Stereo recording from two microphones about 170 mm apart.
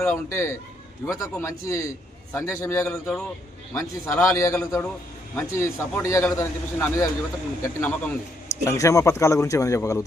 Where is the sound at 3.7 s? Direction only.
15° left (ahead or behind).